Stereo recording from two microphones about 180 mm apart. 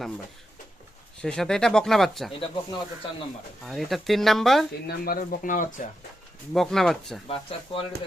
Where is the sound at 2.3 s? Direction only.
30° left (ahead or behind).